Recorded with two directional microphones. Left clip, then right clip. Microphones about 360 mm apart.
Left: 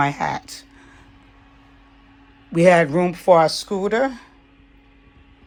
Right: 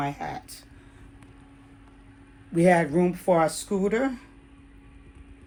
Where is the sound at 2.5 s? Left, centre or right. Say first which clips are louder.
Left 7 dB; left.